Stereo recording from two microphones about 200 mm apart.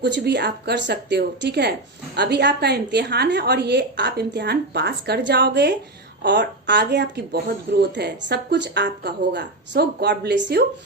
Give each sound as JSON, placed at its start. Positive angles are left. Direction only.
{"t": 0.0, "sound": "speech", "side_deg": -60}